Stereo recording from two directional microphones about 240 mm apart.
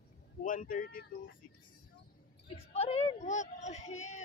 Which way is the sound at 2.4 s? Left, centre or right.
Left.